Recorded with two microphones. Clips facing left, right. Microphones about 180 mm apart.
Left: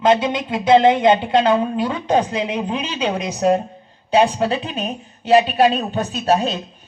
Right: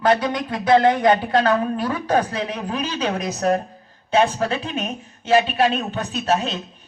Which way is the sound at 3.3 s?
Centre (ahead or behind).